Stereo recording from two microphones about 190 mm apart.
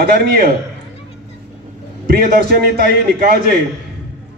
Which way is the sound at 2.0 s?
55° right (ahead or behind).